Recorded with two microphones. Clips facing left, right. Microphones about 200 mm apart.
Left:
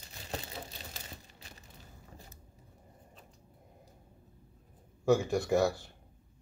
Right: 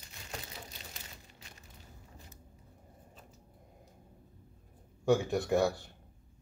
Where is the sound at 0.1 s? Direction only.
30° left (ahead or behind).